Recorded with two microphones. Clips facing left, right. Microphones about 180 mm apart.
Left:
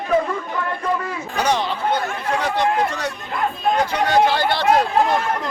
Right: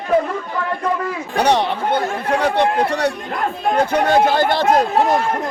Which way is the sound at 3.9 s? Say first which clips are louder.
Right 4 dB; 45° right (ahead or behind).